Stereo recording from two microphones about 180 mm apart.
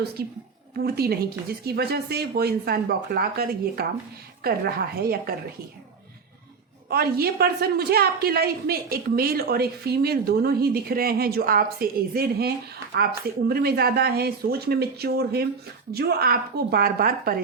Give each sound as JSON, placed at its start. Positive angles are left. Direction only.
{"t": 0.2, "sound": "a woman's voice", "side_deg": -60}
{"t": 6.9, "sound": "a woman's voice", "side_deg": -60}